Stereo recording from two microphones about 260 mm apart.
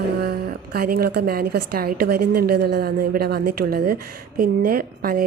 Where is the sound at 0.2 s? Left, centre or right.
Right.